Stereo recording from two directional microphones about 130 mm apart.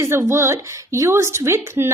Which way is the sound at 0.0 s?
20° right (ahead or behind).